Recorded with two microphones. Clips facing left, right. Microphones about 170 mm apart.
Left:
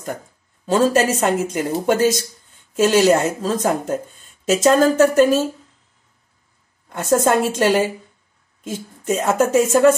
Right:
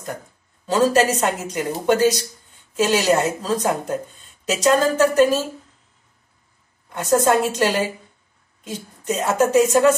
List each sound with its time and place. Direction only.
0.7 s a woman's voice: 50° left (ahead or behind)
6.9 s a woman's voice: 50° left (ahead or behind)